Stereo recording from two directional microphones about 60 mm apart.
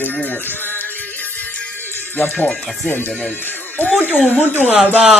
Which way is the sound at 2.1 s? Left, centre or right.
Left.